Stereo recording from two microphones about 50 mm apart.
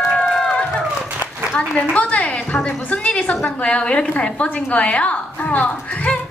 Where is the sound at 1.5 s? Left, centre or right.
Left.